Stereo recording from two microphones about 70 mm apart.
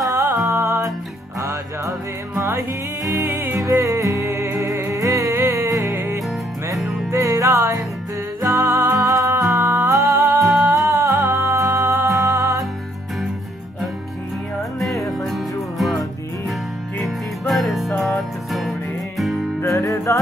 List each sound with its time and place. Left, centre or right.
0.0 s music: right
3.6 s music: right
5.3 s music: right
6.8 s music: centre
7.1 s music: right
9.9 s music: right
11.9 s music: right
12.2 s music: right
15.0 s music: centre
17.0 s music: centre
19.6 s music: left